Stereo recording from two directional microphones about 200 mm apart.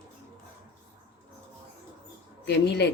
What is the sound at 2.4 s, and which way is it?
Speech, 60° left (ahead or behind).